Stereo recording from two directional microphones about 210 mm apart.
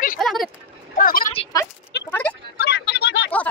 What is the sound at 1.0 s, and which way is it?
Speech, 40° left (ahead or behind).